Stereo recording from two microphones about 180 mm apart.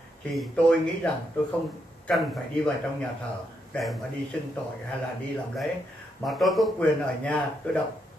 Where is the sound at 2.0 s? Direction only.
Centre (ahead or behind).